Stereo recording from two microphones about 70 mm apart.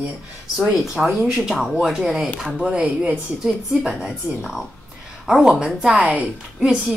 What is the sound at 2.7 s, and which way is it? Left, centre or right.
A woman's voice, centre.